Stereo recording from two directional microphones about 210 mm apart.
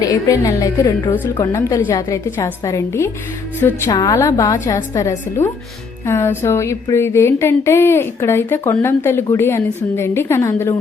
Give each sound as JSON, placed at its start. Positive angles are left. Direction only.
{"t": 0.0, "sound": "speech", "side_deg": 15}